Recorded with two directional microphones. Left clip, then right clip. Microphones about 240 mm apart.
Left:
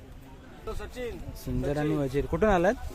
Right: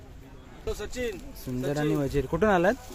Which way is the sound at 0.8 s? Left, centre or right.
Right.